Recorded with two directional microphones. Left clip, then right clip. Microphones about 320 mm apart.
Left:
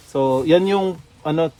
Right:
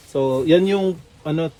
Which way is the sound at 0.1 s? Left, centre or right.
Centre.